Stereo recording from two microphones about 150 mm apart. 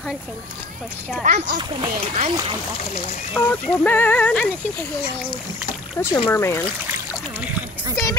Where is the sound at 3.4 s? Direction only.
10° left (ahead or behind).